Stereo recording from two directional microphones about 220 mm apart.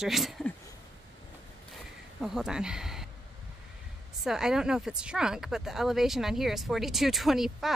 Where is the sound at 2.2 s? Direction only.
Centre (ahead or behind).